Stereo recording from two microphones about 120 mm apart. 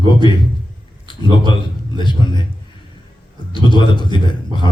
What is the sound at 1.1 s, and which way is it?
A man's voice, 40° left (ahead or behind).